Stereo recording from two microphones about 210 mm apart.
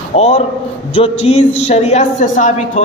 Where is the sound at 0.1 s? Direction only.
30° left (ahead or behind).